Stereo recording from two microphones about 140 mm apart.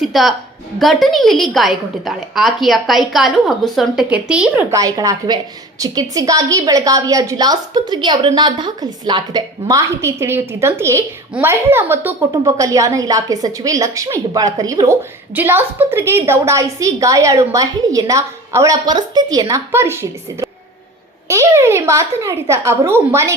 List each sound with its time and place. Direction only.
0.0 s a woman's voice: centre (ahead or behind)
4.7 s a woman's voice: 25° right (ahead or behind)
15.4 s a woman's voice: 15° right (ahead or behind)